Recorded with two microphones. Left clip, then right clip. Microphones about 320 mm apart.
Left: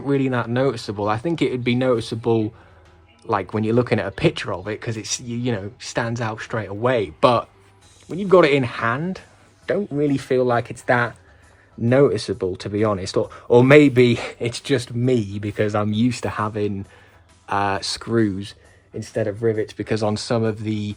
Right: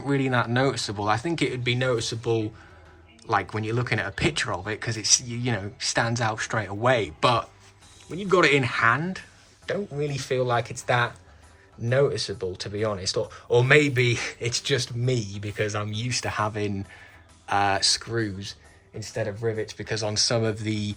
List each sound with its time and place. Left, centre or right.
0.0 s speech: centre
9.6 s speech: left
19.1 s speech: left
19.5 s speech: left; by 20.9 s centre